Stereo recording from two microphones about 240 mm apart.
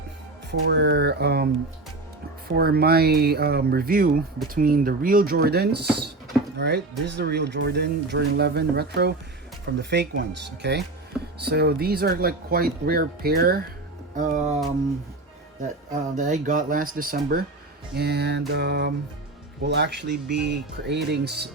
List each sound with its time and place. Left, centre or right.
0.7 s speech: right
2.6 s speech: right
16.1 s speech: right